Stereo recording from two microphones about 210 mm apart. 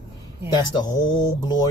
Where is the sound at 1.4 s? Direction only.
20° left (ahead or behind).